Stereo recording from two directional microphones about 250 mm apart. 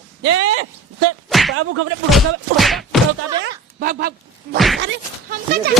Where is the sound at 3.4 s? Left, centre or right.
Right.